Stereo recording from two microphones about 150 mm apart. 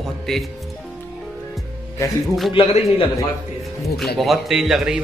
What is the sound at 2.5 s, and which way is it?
Speech, 35° left (ahead or behind).